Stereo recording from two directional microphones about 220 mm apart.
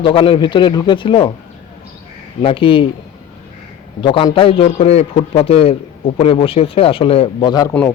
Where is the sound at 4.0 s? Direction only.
20° left (ahead or behind).